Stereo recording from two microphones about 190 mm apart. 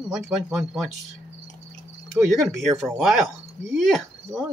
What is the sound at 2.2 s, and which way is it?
Speech, centre (ahead or behind).